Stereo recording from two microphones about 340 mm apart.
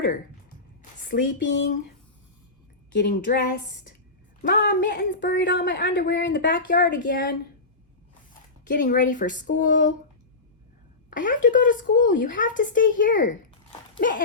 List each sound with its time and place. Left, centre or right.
1.0 s a woman's voice: left
2.9 s a woman's voice: left
4.4 s a woman's voice: left
8.6 s a woman's voice: left
11.1 s a woman's voice: left